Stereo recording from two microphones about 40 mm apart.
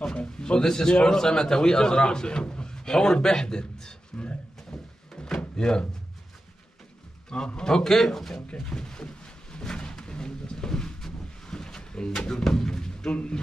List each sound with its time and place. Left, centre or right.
0.1 s a man's voice: left
5.1 s door: centre
5.6 s speech: left
7.2 s a man's voice: left
8.5 s a sound: centre
12.3 s speech: centre